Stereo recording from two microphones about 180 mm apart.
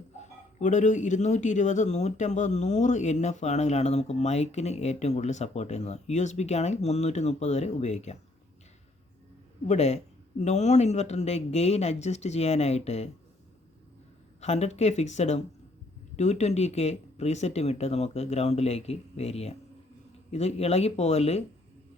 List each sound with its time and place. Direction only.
0.2 s speech: 40° left (ahead or behind)
9.6 s speech: 40° left (ahead or behind)
14.4 s speech: 40° left (ahead or behind)